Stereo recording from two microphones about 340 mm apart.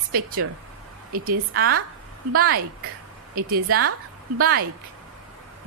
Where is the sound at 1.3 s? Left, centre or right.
Right.